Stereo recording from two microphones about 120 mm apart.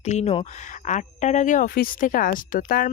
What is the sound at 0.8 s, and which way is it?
Speech, 85° left.